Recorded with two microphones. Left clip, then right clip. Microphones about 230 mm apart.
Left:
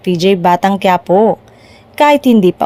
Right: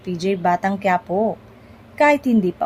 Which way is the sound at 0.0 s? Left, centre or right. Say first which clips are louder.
Left 10 dB; left.